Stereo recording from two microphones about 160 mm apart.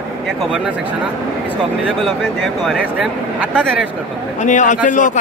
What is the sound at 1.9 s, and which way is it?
Speech, centre (ahead or behind).